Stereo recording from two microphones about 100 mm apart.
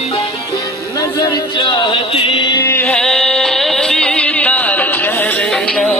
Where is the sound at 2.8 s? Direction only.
5° left (ahead or behind).